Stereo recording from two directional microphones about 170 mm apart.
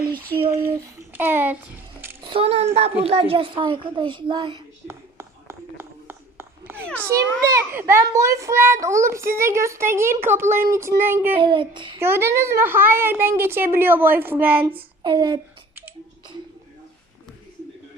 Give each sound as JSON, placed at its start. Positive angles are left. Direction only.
{"t": 0.0, "sound": "a sound", "side_deg": -60}
{"t": 0.9, "sound": "a sound", "side_deg": -10}
{"t": 2.2, "sound": "a child's voice", "side_deg": -35}
{"t": 4.9, "sound": "a sound", "side_deg": -15}
{"t": 6.8, "sound": "a child's voice", "side_deg": 10}
{"t": 7.1, "sound": "a child's voice", "side_deg": -15}
{"t": 11.3, "sound": "a child's voice", "side_deg": -30}
{"t": 11.9, "sound": "a child's voice", "side_deg": -15}
{"t": 14.7, "sound": "speech", "side_deg": -30}